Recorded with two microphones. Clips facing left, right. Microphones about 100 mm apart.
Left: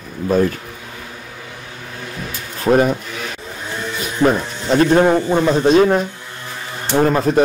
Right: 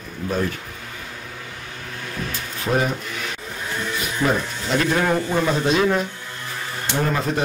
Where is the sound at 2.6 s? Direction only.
45° left (ahead or behind).